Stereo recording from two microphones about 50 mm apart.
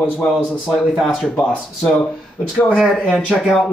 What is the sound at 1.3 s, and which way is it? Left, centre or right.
Speech, left.